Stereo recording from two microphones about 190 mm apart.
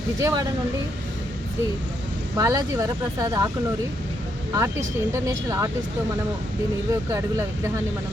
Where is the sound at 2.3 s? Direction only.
20° right (ahead or behind).